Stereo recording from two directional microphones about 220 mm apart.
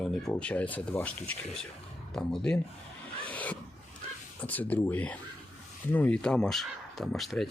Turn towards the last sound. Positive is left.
turn(degrees=0)  # may be behind; listen again after turning